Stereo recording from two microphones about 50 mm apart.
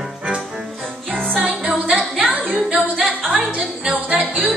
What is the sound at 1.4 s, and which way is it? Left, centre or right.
Music, centre.